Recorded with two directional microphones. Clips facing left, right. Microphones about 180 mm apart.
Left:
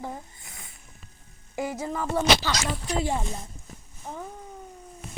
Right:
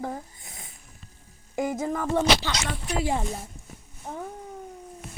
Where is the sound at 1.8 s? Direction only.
45° right (ahead or behind).